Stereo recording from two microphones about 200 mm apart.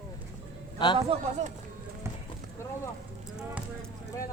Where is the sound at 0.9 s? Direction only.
30° right (ahead or behind).